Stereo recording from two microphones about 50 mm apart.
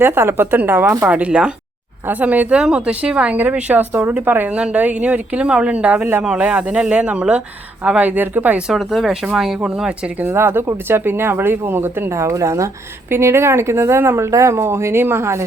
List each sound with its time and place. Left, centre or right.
0.0 s speech: right
1.0 s speech: right
2.0 s speech: right
2.6 s speech: centre
4.0 s speech: right
4.5 s speech: right
8.7 s speech: centre
10.2 s speech: right
13.1 s speech: right